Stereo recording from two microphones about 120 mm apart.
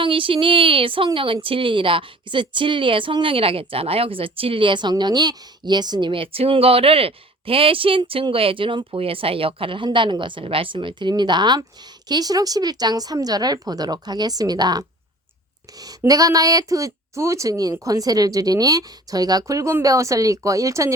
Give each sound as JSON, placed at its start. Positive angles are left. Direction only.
{"t": 0.0, "sound": "a woman's voice", "side_deg": -45}